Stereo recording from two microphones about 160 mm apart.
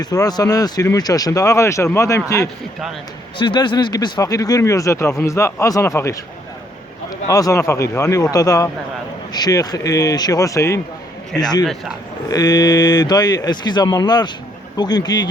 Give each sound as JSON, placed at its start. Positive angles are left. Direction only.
{"t": 0.0, "sound": "speech", "side_deg": 25}
{"t": 3.3, "sound": "speech", "side_deg": 30}
{"t": 7.3, "sound": "speech", "side_deg": 20}
{"t": 11.6, "sound": "a man's voice", "side_deg": 0}
{"t": 12.3, "sound": "speech", "side_deg": 25}